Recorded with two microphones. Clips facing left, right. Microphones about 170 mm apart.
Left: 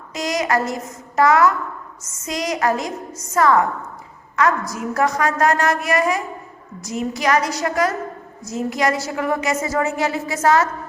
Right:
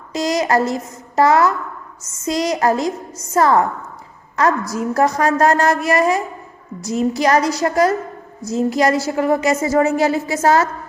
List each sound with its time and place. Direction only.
0.1 s a woman's voice: 35° right (ahead or behind)
4.7 s a woman's voice: 35° right (ahead or behind)